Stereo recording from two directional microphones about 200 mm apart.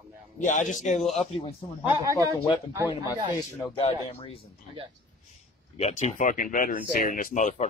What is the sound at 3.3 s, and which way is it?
Speech, 20° left (ahead or behind).